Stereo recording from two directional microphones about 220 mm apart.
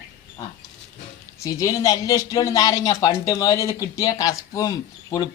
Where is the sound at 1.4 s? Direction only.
15° left (ahead or behind).